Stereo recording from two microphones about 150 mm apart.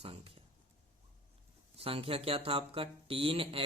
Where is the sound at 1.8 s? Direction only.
40° right (ahead or behind).